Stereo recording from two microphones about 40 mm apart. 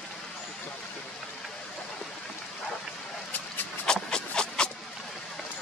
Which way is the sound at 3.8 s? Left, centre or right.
Left.